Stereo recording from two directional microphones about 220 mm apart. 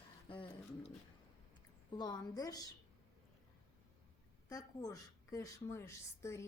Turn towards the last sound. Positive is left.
turn(degrees=10)  # may be behind; listen again after turning